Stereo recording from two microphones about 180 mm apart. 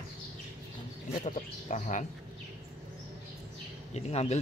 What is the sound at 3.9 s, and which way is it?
Speech, 35° left (ahead or behind).